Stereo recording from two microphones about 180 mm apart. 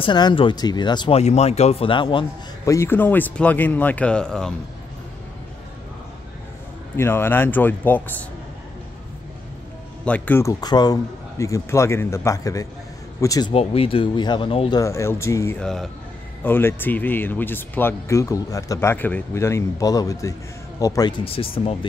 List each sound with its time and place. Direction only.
0.0 s speech: 25° left (ahead or behind)
1.2 s speech: 35° left (ahead or behind); by 4.6 s 5° left (ahead or behind)
7.0 s speech: 15° left (ahead or behind)
10.0 s speech: 10° left (ahead or behind)
13.5 s speech: 30° left (ahead or behind)
14.8 s speech: 15° left (ahead or behind)
15.6 s speech: centre (ahead or behind); by 21.1 s 20° left (ahead or behind)
21.2 s speech: 30° left (ahead or behind)